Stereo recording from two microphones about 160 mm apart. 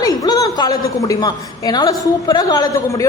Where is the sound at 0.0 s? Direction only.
25° left (ahead or behind).